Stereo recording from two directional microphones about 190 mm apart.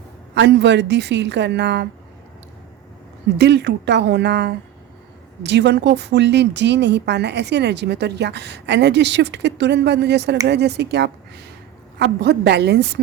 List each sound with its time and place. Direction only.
0.3 s a woman's voice: 65° right (ahead or behind)
3.3 s a woman's voice: 65° right (ahead or behind)